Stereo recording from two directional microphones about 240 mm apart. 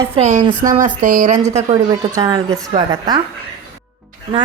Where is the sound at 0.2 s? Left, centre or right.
Right.